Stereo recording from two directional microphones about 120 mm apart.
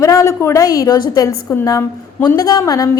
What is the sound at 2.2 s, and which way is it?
Speech, 35° left (ahead or behind).